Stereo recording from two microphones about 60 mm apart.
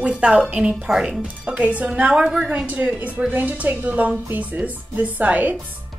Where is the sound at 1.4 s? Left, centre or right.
Right.